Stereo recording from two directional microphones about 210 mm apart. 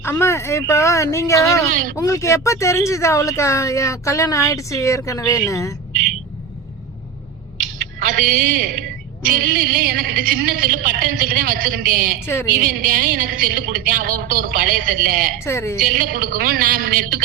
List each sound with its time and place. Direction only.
0.0 s speech: 10° left (ahead or behind)
7.9 s a woman's voice: 45° right (ahead or behind)
12.2 s speech: 10° left (ahead or behind)
12.6 s a woman's voice: 45° right (ahead or behind)
15.4 s speech: 10° left (ahead or behind)
15.9 s a woman's voice: 45° right (ahead or behind)